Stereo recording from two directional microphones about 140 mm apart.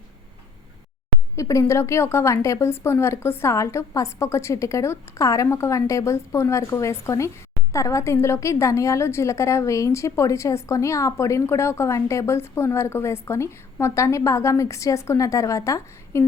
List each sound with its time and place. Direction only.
1.4 s a woman's voice: 20° left (ahead or behind)